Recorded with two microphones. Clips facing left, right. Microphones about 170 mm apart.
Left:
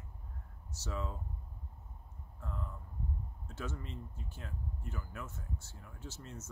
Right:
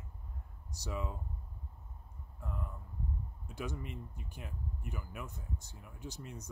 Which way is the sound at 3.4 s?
15° right (ahead or behind).